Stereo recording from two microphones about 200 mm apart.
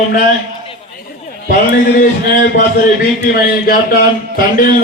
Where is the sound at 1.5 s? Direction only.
45° left (ahead or behind).